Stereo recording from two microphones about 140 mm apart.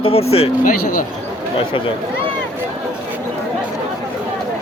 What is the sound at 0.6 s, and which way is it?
Speech, 75° left (ahead or behind).